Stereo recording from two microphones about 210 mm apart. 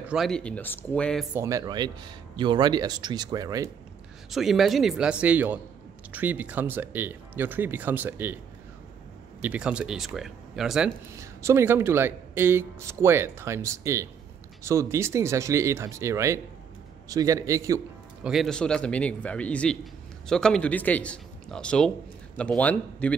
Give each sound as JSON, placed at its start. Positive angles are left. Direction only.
{"t": 0.0, "sound": "a man's voice", "side_deg": -5}
{"t": 1.3, "sound": "speech", "side_deg": -15}
{"t": 4.3, "sound": "a man's voice", "side_deg": 0}
{"t": 9.4, "sound": "a man's voice", "side_deg": -5}
{"t": 11.1, "sound": "speech", "side_deg": -15}
{"t": 18.2, "sound": "a man's voice", "side_deg": 0}